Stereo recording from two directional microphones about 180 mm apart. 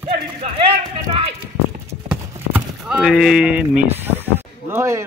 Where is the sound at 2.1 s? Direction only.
5° right (ahead or behind).